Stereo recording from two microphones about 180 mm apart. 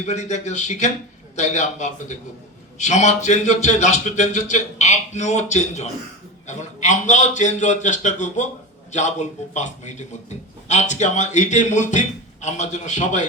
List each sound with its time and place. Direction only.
0.0 s a man's voice: 40° left (ahead or behind)